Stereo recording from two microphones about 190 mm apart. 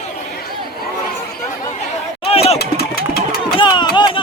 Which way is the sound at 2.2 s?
30° left (ahead or behind).